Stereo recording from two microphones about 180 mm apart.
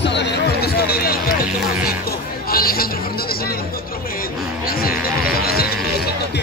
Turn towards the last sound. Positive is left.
turn(degrees=55)  # may be behind; listen again after turning